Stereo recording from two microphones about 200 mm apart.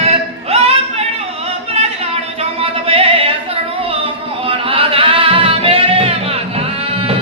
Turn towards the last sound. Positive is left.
turn(degrees=-30)  # may be behind; listen again after turning